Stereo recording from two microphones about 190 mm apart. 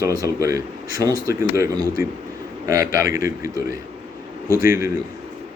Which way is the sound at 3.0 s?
50° left (ahead or behind).